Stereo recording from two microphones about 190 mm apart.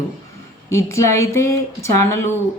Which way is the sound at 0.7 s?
15° left (ahead or behind).